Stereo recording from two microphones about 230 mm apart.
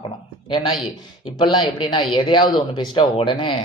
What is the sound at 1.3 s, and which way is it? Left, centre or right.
Speech, centre.